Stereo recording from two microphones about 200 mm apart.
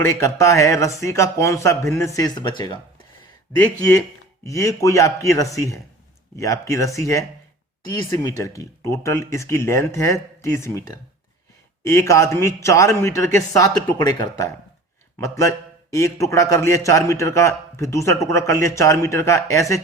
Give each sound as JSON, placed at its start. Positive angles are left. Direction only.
{"t": 0.0, "sound": "a man's voice", "side_deg": 15}
{"t": 4.4, "sound": "a man's voice", "side_deg": 15}